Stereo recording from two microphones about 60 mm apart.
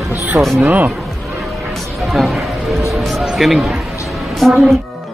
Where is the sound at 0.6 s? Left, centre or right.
Right.